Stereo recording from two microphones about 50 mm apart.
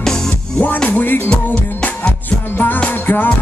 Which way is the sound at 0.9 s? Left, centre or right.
Left.